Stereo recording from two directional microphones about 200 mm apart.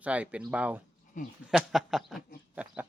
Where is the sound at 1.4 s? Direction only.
5° right (ahead or behind).